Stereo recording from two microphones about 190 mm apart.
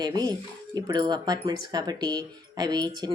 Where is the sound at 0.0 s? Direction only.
20° right (ahead or behind).